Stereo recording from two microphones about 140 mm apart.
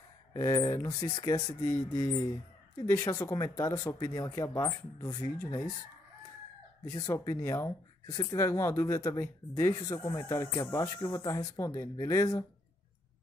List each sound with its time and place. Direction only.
0.3 s speech: 20° left (ahead or behind)
6.9 s speech: 25° left (ahead or behind)